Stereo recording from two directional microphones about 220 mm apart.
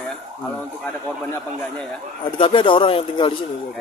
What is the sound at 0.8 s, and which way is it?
A man's voice, 10° left (ahead or behind).